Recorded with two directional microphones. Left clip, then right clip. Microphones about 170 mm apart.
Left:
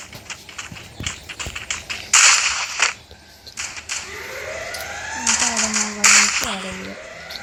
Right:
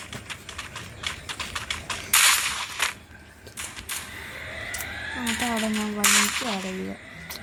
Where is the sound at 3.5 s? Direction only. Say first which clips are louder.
Left 7 dB; 5° right (ahead or behind).